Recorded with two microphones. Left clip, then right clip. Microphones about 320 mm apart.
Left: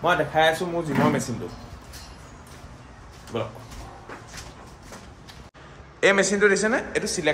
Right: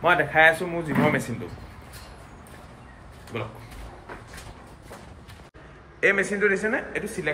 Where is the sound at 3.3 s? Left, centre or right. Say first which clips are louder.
Left 4 dB; centre.